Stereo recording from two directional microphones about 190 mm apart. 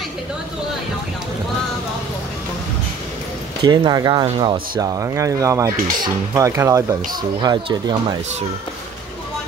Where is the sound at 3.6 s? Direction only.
20° right (ahead or behind).